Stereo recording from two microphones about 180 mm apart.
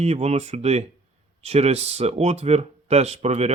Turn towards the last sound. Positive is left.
turn(degrees=-35)  # may be behind; listen again after turning